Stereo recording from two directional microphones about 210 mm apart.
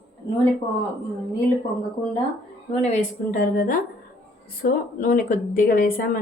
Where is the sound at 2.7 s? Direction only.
30° left (ahead or behind).